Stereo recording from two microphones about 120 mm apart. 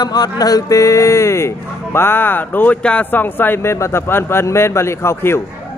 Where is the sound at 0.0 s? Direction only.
35° left (ahead or behind).